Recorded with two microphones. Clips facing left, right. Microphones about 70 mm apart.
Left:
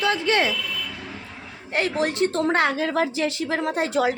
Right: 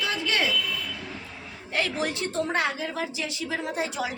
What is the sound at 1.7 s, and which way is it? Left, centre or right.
Speech, left.